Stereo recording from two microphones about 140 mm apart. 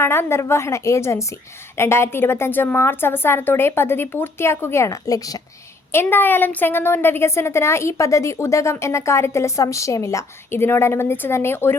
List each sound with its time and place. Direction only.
0.0 s a woman's voice: 15° left (ahead or behind)